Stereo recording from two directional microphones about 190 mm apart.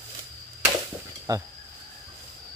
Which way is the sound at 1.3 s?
20° right (ahead or behind).